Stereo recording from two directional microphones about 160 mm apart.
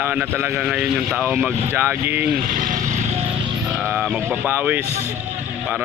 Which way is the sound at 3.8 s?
5° right (ahead or behind).